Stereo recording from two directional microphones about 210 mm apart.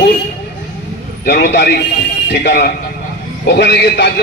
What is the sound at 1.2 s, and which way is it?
A man's voice, 50° left (ahead or behind).